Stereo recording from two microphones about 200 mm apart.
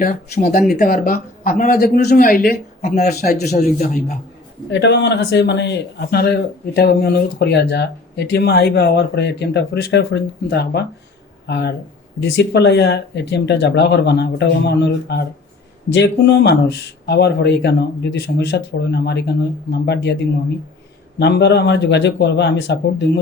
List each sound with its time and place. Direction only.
0.0 s speech: 45° left (ahead or behind)
4.7 s a man's voice: 60° left (ahead or behind)